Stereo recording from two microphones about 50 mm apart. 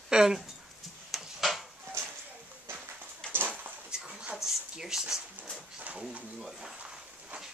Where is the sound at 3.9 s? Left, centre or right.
Centre.